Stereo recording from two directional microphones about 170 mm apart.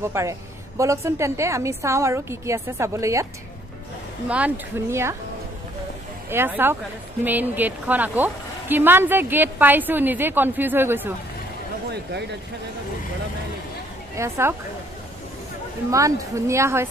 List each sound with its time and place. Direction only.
0.0 s speech: 15° right (ahead or behind)
4.3 s speech: 10° right (ahead or behind)
6.3 s speech: 10° right (ahead or behind)
11.9 s speech: 80° right
14.1 s speech: 15° right (ahead or behind)
15.9 s speech: 20° right (ahead or behind)